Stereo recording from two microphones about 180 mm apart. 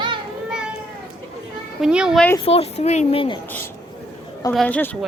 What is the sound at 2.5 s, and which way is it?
Speech, 35° left (ahead or behind).